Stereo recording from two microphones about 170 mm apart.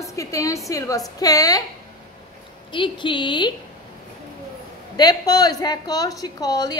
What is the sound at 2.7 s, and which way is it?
Speech, 30° left (ahead or behind).